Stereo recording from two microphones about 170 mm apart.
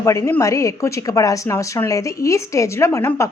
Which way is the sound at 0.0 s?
15° left (ahead or behind).